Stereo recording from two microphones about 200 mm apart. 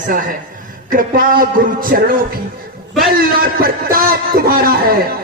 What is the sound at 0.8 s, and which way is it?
A man's voice, 45° right (ahead or behind).